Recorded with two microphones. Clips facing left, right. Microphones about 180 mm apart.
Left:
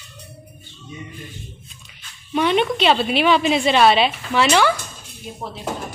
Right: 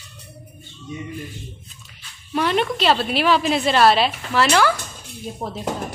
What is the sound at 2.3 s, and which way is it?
A woman's voice, centre (ahead or behind).